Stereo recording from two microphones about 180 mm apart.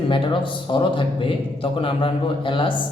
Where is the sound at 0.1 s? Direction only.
25° left (ahead or behind).